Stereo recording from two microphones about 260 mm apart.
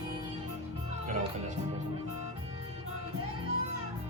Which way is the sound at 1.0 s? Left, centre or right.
Right.